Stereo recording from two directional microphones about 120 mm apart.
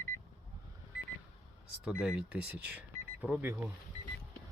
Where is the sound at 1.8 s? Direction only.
5° right (ahead or behind).